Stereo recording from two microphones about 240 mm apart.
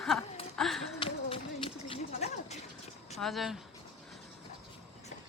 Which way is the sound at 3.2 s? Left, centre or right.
Centre.